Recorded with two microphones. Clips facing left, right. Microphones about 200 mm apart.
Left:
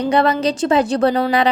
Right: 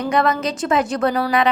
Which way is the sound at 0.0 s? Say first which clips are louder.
Left 3 dB; 30° left (ahead or behind).